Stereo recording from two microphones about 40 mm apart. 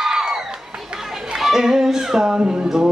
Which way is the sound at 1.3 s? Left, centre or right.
Centre.